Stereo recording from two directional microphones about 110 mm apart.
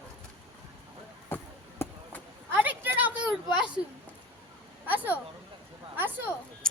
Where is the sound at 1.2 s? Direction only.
20° left (ahead or behind).